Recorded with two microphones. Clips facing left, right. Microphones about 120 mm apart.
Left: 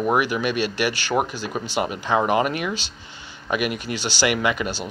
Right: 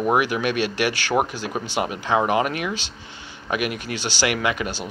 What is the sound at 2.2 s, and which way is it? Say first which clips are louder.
Speech: left 1 dB; 5° left (ahead or behind).